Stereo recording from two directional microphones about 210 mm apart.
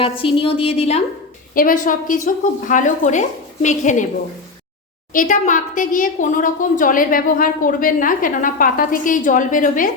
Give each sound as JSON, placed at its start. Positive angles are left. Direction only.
{"t": 0.0, "sound": "a woman's voice", "side_deg": 25}
{"t": 1.5, "sound": "a woman's voice", "side_deg": 40}
{"t": 5.1, "sound": "a woman's voice", "side_deg": 40}